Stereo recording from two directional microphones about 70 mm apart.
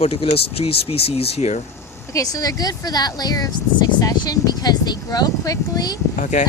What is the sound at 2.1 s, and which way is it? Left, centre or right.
Speech, left.